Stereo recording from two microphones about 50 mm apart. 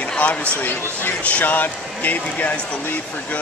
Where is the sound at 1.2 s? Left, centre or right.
Left.